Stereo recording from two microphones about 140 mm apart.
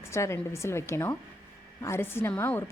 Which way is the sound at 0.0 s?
20° left (ahead or behind).